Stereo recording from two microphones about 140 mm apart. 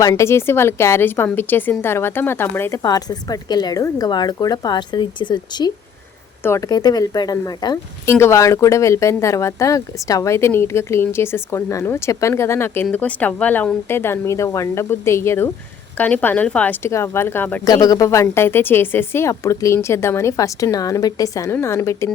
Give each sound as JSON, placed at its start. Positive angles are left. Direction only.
{"t": 0.0, "sound": "a woman's voice", "side_deg": 25}
{"t": 17.7, "sound": "speech", "side_deg": 25}